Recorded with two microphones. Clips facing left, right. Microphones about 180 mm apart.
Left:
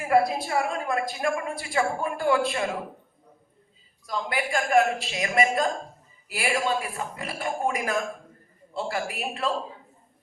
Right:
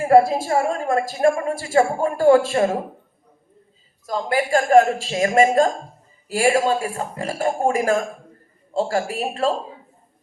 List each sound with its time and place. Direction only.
0.0 s a woman's voice: 30° right (ahead or behind)
0.3 s a woman's voice: 45° right (ahead or behind)
4.0 s a woman's voice: 40° right (ahead or behind)